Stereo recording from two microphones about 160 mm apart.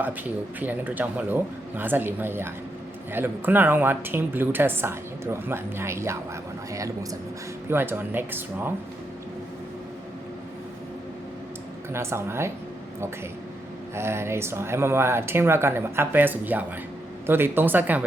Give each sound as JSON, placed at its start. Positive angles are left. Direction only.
{"t": 0.6, "sound": "speech", "side_deg": -10}
{"t": 11.9, "sound": "speech", "side_deg": -15}
{"t": 13.9, "sound": "speech", "side_deg": -15}